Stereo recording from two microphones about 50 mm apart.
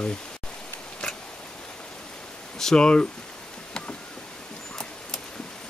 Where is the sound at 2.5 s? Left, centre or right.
Centre.